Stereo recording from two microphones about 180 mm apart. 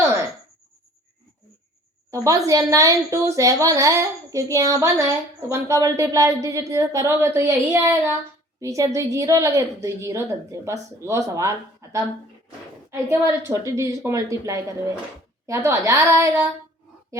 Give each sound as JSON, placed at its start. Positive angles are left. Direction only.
{"t": 2.0, "sound": "a woman's voice", "side_deg": -15}